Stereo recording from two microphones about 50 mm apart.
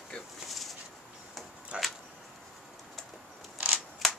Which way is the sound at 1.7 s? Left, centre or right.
Right.